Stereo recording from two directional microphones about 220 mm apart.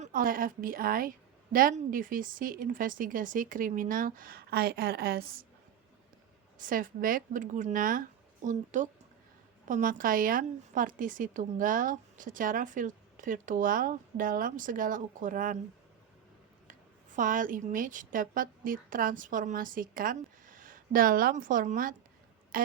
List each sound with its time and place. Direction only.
0.0 s a woman's voice: 40° right (ahead or behind)
6.6 s a woman's voice: 40° right (ahead or behind)
17.2 s a woman's voice: 35° right (ahead or behind)